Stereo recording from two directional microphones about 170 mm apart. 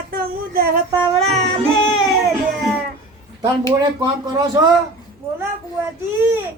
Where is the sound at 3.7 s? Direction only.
25° right (ahead or behind).